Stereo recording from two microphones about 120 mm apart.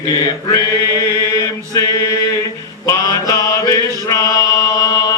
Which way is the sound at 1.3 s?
25° left (ahead or behind).